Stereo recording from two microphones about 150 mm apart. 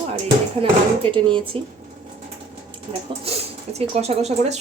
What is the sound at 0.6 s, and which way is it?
Speech, 35° right (ahead or behind).